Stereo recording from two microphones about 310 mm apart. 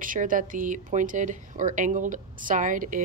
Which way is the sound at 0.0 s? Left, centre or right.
Right.